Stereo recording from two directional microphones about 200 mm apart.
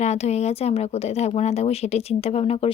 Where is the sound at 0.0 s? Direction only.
35° left (ahead or behind).